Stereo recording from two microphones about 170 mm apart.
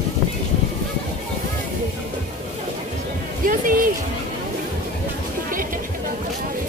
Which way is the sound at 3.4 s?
55° right (ahead or behind).